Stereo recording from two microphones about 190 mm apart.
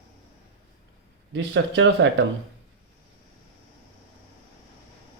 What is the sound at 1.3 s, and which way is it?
Speech, 75° right (ahead or behind).